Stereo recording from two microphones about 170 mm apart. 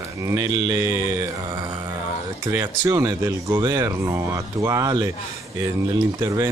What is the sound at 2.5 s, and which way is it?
Speech, 15° right (ahead or behind).